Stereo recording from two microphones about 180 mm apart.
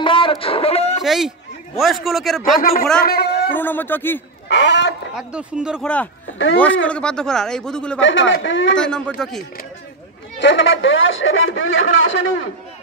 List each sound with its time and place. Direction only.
0.0 s a sound: 30° left (ahead or behind)
1.0 s speech: centre (ahead or behind)
3.0 s a man's voice: 60° left (ahead or behind)
3.5 s speech: 10° left (ahead or behind)
4.5 s speech: 75° left (ahead or behind)
5.1 s speech: 5° right (ahead or behind)
6.3 s speech: 90° left
6.6 s speech: 5° left (ahead or behind)
8.0 s speech: 90° left
8.7 s speech: 5° left (ahead or behind)
10.4 s speech: 90° left